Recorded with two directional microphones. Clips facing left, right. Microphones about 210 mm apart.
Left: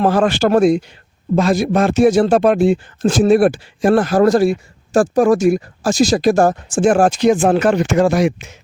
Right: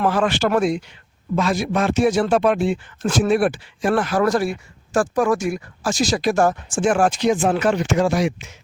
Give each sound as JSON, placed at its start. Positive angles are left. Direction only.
{"t": 0.0, "sound": "speech", "side_deg": 40}